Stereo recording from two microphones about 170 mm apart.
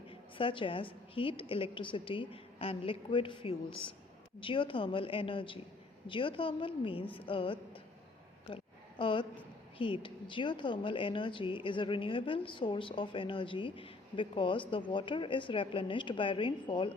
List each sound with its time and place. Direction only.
0.1 s a woman's voice: 30° left (ahead or behind)
8.4 s a sound: 30° left (ahead or behind)
9.7 s speech: 30° left (ahead or behind)